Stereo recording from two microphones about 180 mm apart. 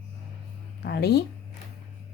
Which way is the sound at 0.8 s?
65° left (ahead or behind).